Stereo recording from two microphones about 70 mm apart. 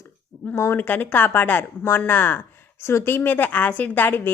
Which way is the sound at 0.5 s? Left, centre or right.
Left.